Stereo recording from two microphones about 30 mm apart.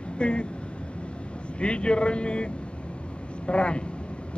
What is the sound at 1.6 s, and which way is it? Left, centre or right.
Speech, left.